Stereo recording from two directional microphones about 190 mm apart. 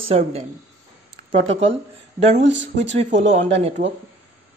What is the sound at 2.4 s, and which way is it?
Speech, 70° right (ahead or behind).